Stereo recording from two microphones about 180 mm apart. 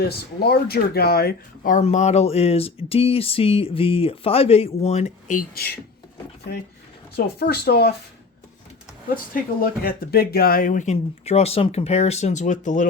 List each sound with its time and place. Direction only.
0.0 s speech: 60° left (ahead or behind)
7.3 s speech: 60° left (ahead or behind)
9.1 s speech: 50° left (ahead or behind)